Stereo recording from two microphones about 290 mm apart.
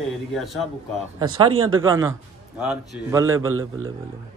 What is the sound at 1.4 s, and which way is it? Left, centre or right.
Speech, right.